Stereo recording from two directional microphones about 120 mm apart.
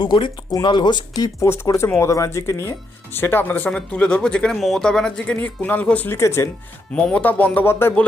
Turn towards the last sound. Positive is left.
turn(degrees=20)  # may be behind; listen again after turning